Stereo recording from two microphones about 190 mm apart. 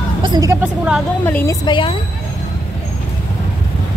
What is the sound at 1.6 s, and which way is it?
Speech, 25° left (ahead or behind).